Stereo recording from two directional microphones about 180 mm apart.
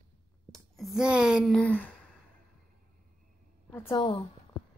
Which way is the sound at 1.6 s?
10° left (ahead or behind).